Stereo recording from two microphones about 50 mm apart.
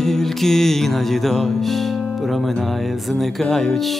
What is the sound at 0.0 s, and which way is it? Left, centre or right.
Music, centre.